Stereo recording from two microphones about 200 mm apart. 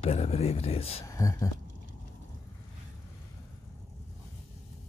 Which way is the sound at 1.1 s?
15° left (ahead or behind).